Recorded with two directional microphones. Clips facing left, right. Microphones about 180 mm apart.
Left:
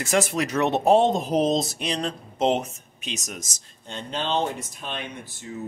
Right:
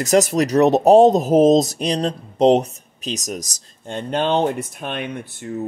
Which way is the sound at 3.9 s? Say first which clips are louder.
Right 8 dB; 55° right (ahead or behind).